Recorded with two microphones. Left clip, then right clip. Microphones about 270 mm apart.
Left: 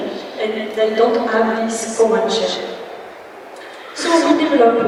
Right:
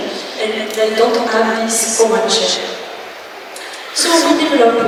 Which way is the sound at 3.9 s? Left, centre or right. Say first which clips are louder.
Right 2 dB; centre.